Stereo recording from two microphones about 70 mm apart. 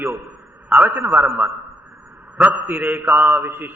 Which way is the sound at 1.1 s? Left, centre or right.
Right.